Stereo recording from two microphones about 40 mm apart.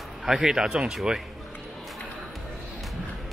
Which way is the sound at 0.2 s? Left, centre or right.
Centre.